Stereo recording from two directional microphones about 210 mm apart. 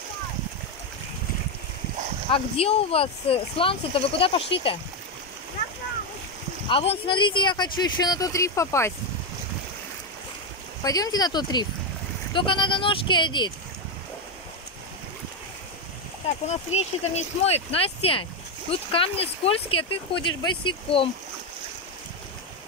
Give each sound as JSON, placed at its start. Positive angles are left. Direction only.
{"t": 2.3, "sound": "speech", "side_deg": 25}
{"t": 6.7, "sound": "speech", "side_deg": 25}
{"t": 10.8, "sound": "speech", "side_deg": 15}
{"t": 16.3, "sound": "speech", "side_deg": 30}